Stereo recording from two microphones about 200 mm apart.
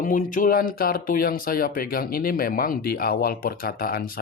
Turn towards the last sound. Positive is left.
turn(degrees=45)  # may be behind; listen again after turning